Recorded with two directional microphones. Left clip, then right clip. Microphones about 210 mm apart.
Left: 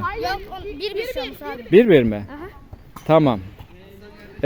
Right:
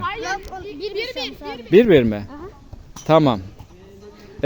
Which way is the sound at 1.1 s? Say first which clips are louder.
Left 1 dB; 50° right (ahead or behind).